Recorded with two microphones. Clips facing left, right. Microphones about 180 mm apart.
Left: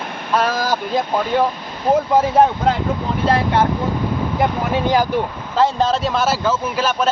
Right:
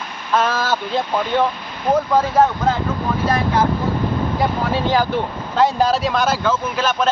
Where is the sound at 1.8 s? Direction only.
25° left (ahead or behind).